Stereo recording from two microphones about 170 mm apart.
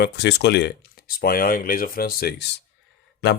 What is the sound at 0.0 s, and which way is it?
Speech, 85° left.